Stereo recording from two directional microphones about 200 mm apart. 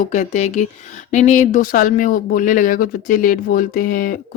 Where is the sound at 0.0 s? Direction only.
35° left (ahead or behind).